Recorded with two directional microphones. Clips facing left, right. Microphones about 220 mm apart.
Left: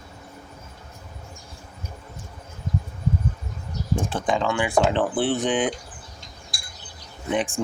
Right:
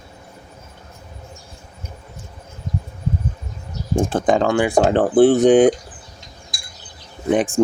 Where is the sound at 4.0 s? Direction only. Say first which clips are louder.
Right 8 dB; 45° right (ahead or behind).